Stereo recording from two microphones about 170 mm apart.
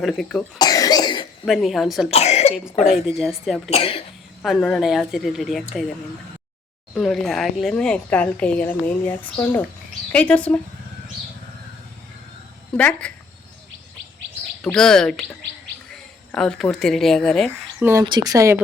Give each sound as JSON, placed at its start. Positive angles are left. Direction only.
{"t": 0.0, "sound": "speech", "side_deg": 0}
{"t": 0.6, "sound": "cough", "side_deg": 20}
{"t": 1.5, "sound": "speech", "side_deg": 0}
{"t": 2.0, "sound": "cough", "side_deg": 40}
{"t": 3.2, "sound": "speech", "side_deg": 0}
{"t": 3.7, "sound": "cough", "side_deg": 35}
{"t": 4.4, "sound": "speech", "side_deg": 0}
{"t": 6.9, "sound": "speech", "side_deg": 0}
{"t": 12.7, "sound": "speech", "side_deg": 5}
{"t": 14.6, "sound": "speech", "side_deg": 5}
{"t": 17.5, "sound": "speech", "side_deg": -15}
{"t": 18.0, "sound": "speech", "side_deg": -25}